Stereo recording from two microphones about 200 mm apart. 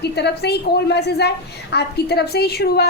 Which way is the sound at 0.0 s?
55° left (ahead or behind).